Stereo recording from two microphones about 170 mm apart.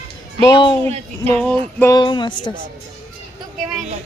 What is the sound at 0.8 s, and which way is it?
Speech, 35° right (ahead or behind).